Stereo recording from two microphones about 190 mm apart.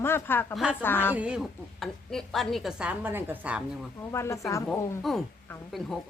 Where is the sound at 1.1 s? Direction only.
5° right (ahead or behind).